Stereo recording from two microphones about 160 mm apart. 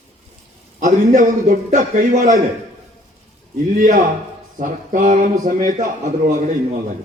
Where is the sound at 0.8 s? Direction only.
55° right (ahead or behind).